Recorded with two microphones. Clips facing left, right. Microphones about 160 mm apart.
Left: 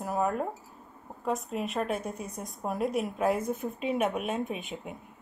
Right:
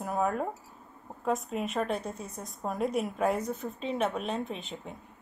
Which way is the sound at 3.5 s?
15° left (ahead or behind).